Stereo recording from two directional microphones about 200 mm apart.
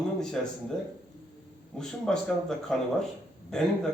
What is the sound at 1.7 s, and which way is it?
A man's voice, 5° left (ahead or behind).